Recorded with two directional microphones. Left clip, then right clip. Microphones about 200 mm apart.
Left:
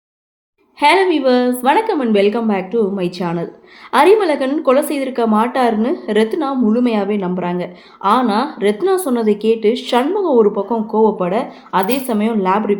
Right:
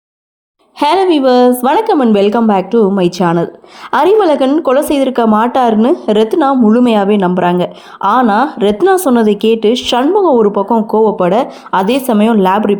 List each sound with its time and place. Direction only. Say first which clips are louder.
0.8 s speech: right 3 dB; 40° right (ahead or behind)